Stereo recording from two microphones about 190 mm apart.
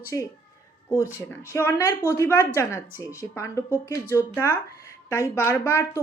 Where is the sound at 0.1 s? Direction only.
15° left (ahead or behind).